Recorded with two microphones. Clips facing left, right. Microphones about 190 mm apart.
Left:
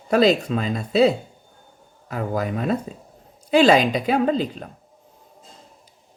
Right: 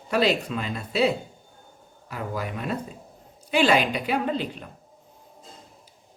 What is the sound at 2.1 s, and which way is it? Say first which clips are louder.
Speech: left 6 dB; 40° left (ahead or behind).